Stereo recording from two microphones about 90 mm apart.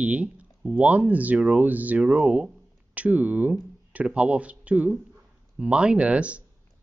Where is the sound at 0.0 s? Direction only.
15° right (ahead or behind).